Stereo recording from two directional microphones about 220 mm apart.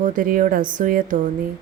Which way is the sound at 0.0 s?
35° right (ahead or behind).